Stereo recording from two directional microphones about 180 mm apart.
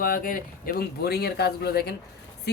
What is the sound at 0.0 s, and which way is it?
Speech, 50° left (ahead or behind).